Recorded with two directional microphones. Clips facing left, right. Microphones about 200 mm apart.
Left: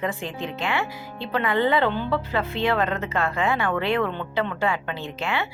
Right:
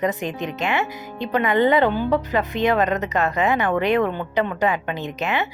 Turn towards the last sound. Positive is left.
turn(degrees=-20)  # may be behind; listen again after turning